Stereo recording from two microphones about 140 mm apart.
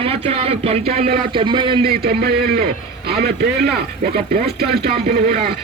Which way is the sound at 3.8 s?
90° right.